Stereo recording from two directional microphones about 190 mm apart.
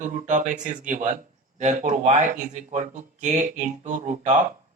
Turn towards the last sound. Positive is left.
turn(degrees=-40)  # may be behind; listen again after turning